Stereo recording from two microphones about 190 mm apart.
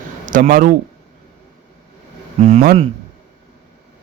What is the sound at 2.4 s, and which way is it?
Speech, 35° right (ahead or behind).